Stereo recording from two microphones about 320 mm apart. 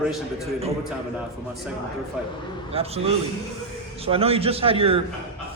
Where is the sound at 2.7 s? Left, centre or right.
Centre.